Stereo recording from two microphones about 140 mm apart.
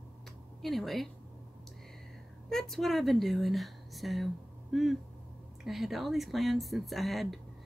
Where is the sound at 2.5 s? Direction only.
Centre (ahead or behind).